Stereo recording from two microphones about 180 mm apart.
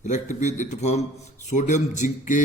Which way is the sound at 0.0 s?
45° left (ahead or behind).